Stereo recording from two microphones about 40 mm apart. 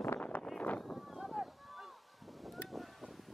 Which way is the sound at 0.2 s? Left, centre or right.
Left.